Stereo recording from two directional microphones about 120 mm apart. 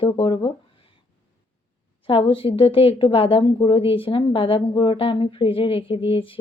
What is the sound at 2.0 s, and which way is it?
A woman's voice, 45° left (ahead or behind).